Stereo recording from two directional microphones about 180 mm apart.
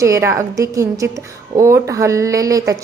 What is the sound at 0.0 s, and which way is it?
A woman's voice, 15° right (ahead or behind).